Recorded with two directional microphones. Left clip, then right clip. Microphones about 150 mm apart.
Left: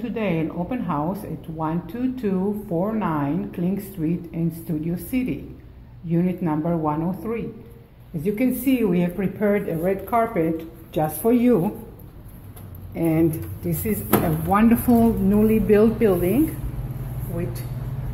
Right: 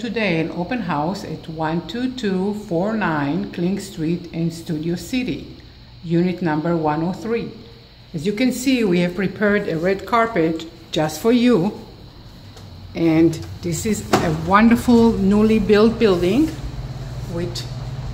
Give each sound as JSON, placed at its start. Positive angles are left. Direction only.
{"t": 0.0, "sound": "a woman's voice", "side_deg": -15}
{"t": 12.9, "sound": "speech", "side_deg": -15}